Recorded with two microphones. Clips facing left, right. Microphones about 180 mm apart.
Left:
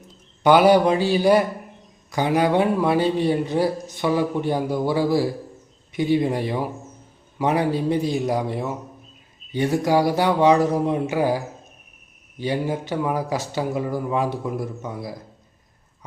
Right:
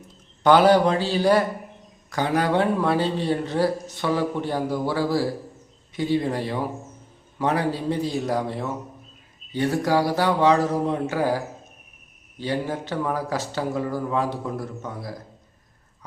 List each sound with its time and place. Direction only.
0.4 s speech: 10° left (ahead or behind)